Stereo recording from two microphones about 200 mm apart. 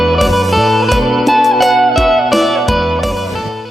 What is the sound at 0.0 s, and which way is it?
Music, centre (ahead or behind).